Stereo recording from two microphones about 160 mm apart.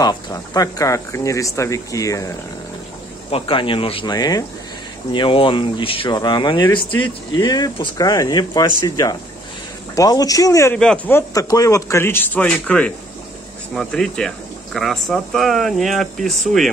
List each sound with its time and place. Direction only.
0.0 s speech: 25° left (ahead or behind)
3.3 s speech: 35° left (ahead or behind); by 10.8 s 20° left (ahead or behind)
10.8 s speech: 5° left (ahead or behind)
11.1 s a man's voice: 20° left (ahead or behind); by 16.7 s centre (ahead or behind)